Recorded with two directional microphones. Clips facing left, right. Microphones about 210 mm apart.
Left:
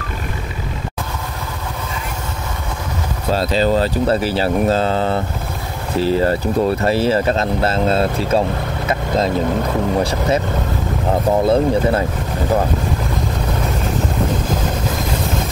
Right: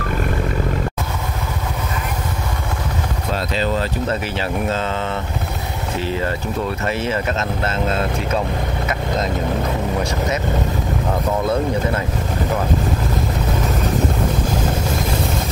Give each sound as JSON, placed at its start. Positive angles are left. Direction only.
{"t": 3.3, "sound": "speech", "side_deg": 35}
{"t": 11.4, "sound": "speech", "side_deg": 30}